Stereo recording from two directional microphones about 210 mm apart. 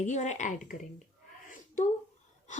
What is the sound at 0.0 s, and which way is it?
Speech, 35° left (ahead or behind).